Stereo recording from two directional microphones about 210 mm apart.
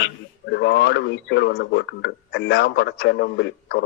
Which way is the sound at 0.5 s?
55° left (ahead or behind).